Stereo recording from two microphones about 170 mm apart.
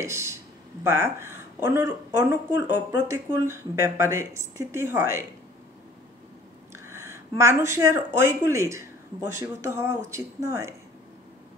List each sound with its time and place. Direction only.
0.0 s speech: 15° right (ahead or behind)
6.7 s speech: 15° right (ahead or behind)